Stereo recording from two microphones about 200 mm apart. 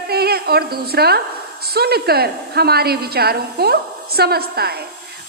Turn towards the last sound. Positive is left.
turn(degrees=-50)  # may be behind; listen again after turning